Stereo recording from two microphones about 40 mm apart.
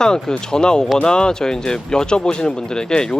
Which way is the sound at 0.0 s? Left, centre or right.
Centre.